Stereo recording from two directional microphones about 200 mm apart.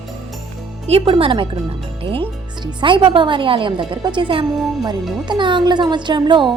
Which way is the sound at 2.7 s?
25° right (ahead or behind).